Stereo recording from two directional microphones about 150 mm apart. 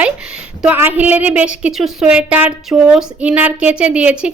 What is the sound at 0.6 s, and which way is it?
A woman's voice, 10° right (ahead or behind).